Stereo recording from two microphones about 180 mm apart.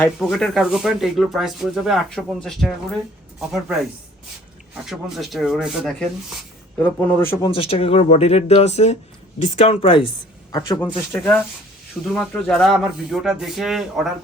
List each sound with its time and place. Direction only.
0.0 s speech: 5° left (ahead or behind)
6.7 s a man's voice: 10° left (ahead or behind)
7.4 s speech: 30° left (ahead or behind)
10.9 s a man's voice: 10° left (ahead or behind)